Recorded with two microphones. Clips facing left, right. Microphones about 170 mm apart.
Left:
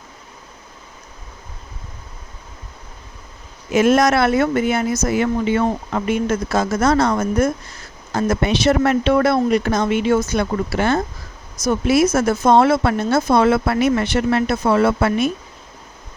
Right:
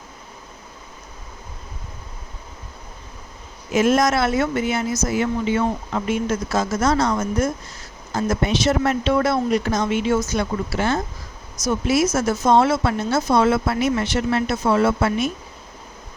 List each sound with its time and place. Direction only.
3.7 s speech: 65° left (ahead or behind)